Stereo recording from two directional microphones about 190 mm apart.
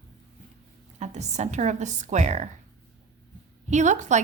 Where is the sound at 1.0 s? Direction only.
35° right (ahead or behind).